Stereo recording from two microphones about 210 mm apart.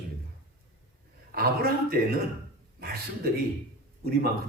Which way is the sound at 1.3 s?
45° right (ahead or behind).